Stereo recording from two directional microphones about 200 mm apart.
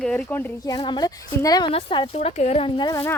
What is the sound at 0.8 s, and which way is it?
Speech, 20° left (ahead or behind).